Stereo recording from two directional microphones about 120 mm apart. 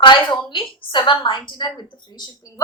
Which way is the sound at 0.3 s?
45° left (ahead or behind).